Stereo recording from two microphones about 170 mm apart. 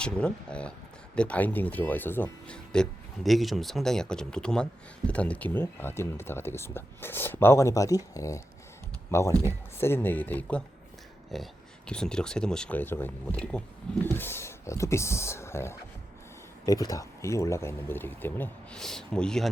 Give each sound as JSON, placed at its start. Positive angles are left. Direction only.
{"t": 0.0, "sound": "speech", "side_deg": 5}
{"t": 9.4, "sound": "speech", "side_deg": 15}